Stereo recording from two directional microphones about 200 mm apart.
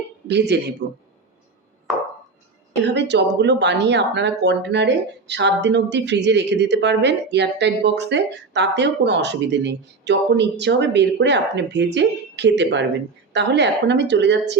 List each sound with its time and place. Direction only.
0.3 s speech: 55° right (ahead or behind)
2.8 s speech: 60° right (ahead or behind)